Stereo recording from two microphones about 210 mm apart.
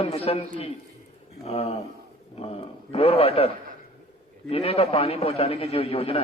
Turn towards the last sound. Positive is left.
turn(degrees=30)  # may be behind; listen again after turning